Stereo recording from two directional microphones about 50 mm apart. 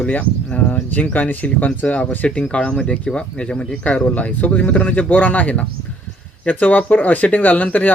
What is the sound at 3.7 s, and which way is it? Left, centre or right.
Speech, left.